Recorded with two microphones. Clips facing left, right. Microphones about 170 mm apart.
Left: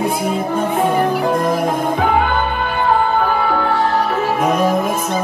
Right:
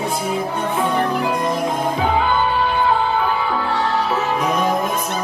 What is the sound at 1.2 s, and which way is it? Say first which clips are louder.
Music: left 4 dB; 55° left (ahead or behind).